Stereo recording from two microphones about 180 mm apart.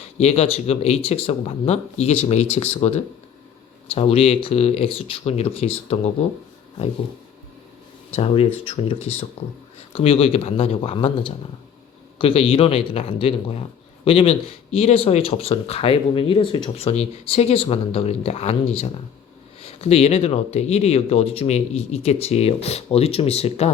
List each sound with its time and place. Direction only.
0.0 s speech: 35° left (ahead or behind)
8.1 s speech: 35° left (ahead or behind)